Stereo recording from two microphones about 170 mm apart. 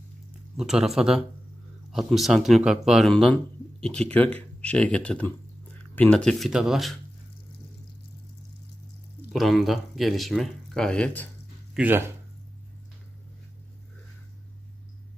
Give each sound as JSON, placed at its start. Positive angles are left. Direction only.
{"t": 0.6, "sound": "speech", "side_deg": -5}
{"t": 9.3, "sound": "speech", "side_deg": 0}
{"t": 11.7, "sound": "speech", "side_deg": -10}